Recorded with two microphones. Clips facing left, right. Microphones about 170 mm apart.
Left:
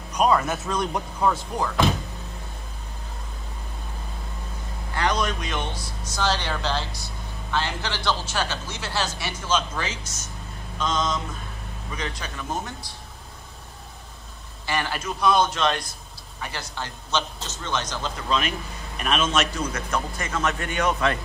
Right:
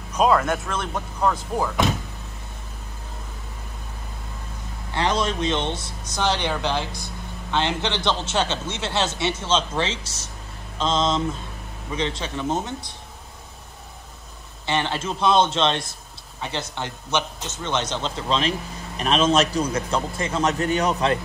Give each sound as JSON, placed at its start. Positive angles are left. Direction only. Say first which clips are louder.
{"t": 0.1, "sound": "speech", "louder": "right 2 dB", "side_deg": 0}
{"t": 4.9, "sound": "speech", "louder": "right 2 dB", "side_deg": -25}
{"t": 14.7, "sound": "a man's voice", "louder": "right 3 dB", "side_deg": -25}